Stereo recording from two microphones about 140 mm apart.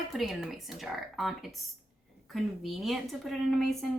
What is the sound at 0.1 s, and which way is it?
Speech, centre (ahead or behind).